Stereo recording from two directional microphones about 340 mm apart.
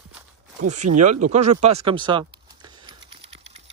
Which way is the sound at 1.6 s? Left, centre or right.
Centre.